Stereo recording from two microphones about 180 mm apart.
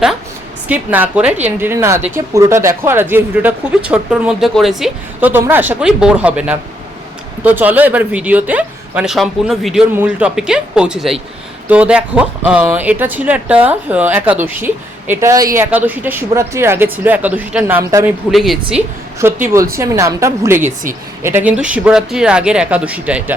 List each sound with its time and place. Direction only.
0.7 s a woman's voice: 10° right (ahead or behind)
18.3 s speech: centre (ahead or behind)
19.2 s a woman's voice: 15° right (ahead or behind)